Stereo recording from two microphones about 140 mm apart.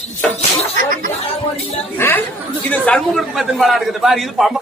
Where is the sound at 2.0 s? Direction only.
15° left (ahead or behind); by 4.5 s centre (ahead or behind).